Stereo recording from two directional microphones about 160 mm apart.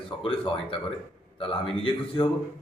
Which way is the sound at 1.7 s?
35° left (ahead or behind).